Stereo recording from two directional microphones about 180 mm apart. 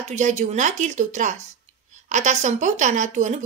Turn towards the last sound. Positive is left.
turn(degrees=-40)  # may be behind; listen again after turning